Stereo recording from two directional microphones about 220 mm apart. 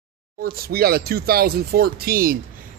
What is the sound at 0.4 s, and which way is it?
Speech, 45° right (ahead or behind).